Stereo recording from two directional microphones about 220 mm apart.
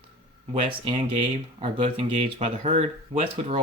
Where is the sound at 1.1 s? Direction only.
25° right (ahead or behind).